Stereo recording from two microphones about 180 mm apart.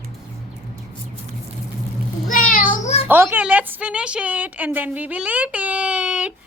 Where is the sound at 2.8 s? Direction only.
35° left (ahead or behind).